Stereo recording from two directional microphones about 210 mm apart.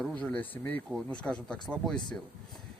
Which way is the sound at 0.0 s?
5° left (ahead or behind).